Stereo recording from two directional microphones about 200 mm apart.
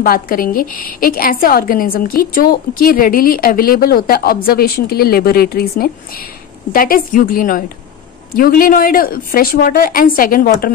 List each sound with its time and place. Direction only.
0.0 s a woman's voice: 45° left (ahead or behind)